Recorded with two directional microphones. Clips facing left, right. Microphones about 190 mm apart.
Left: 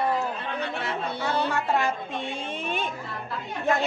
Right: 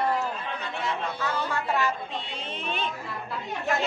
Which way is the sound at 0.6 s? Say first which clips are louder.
Even; 65° left (ahead or behind).